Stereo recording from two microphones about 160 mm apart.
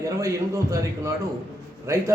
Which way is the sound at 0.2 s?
20° right (ahead or behind).